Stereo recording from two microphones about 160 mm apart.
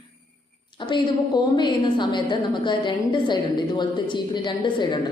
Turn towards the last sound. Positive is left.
turn(degrees=30)  # may be behind; listen again after turning